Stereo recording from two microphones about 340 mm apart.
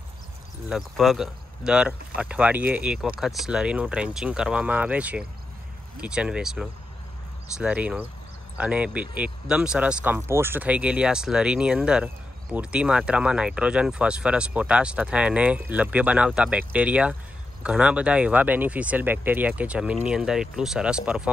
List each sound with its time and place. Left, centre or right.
0.7 s speech: centre